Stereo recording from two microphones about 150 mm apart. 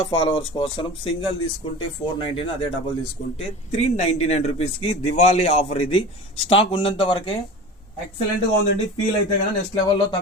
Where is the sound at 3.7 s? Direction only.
45° left (ahead or behind).